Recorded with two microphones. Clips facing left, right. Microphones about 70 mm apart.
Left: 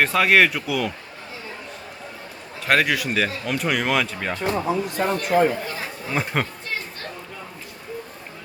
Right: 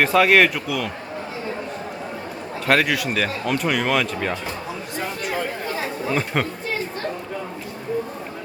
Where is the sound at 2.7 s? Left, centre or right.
Centre.